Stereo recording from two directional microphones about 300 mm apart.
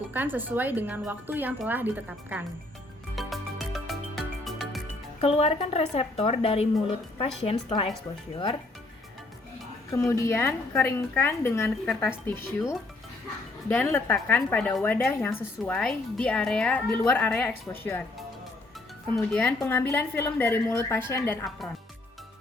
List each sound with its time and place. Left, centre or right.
0.1 s a woman's voice: centre
3.2 s music: centre
5.2 s speech: left
9.9 s a woman's voice: centre
13.7 s a woman's voice: centre
19.1 s a woman's voice: centre